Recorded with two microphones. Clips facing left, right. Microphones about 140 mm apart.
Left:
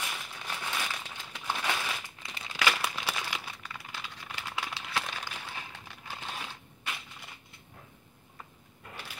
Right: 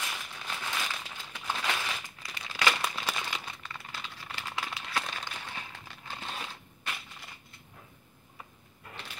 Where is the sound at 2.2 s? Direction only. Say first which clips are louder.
Even; 25° left (ahead or behind).